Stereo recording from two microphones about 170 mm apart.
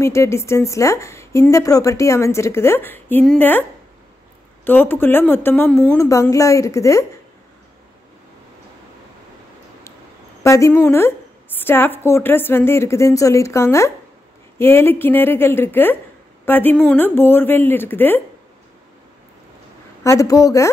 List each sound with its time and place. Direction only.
0.0 s a woman's voice: 15° left (ahead or behind)
4.6 s a woman's voice: 10° left (ahead or behind)
10.4 s a woman's voice: 15° left (ahead or behind)
20.0 s a woman's voice: 20° left (ahead or behind)